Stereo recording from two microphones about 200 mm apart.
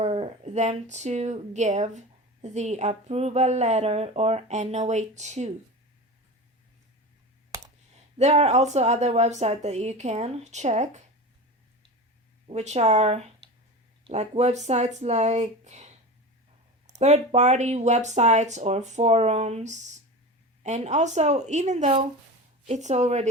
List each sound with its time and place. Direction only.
0.0 s speech: 30° right (ahead or behind)
8.2 s speech: 35° right (ahead or behind)
12.5 s speech: 35° right (ahead or behind)
17.0 s speech: 35° right (ahead or behind)